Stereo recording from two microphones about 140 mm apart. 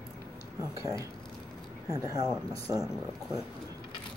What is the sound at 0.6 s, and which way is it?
Speech, 25° right (ahead or behind).